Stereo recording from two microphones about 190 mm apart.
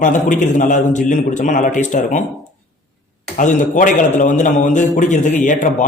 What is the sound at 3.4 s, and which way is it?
A man's voice, 40° left (ahead or behind).